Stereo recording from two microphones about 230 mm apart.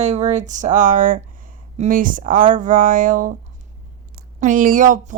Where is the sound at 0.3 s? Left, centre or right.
Right.